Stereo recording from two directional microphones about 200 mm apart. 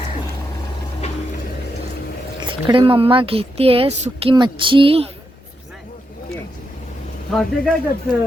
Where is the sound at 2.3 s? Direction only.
25° right (ahead or behind).